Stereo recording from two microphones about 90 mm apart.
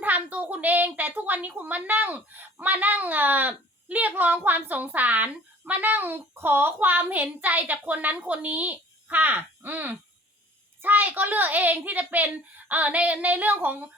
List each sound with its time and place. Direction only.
0.0 s a child's voice: 15° right (ahead or behind)